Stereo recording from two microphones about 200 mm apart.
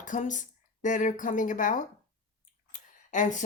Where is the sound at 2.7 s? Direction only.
40° left (ahead or behind).